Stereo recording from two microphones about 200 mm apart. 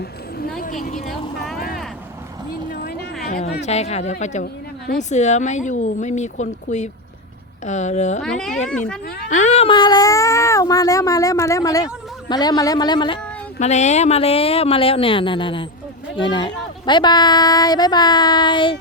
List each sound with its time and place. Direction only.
0.6 s speech: 40° left (ahead or behind)
3.2 s speech: 35° left (ahead or behind)
8.2 s speech: centre (ahead or behind)
9.3 s speech: 35° left (ahead or behind)
13.6 s speech: 35° left (ahead or behind)